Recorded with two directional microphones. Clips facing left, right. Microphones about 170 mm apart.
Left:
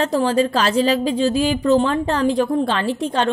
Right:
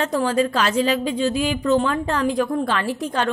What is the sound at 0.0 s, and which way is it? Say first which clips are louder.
A woman's voice: left 3 dB; 30° left (ahead or behind).